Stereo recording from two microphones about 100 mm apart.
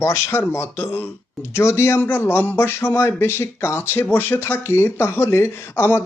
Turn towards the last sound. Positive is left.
turn(degrees=25)  # may be behind; listen again after turning